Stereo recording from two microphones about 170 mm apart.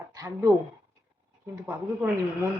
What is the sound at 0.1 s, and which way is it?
Speech, 20° right (ahead or behind).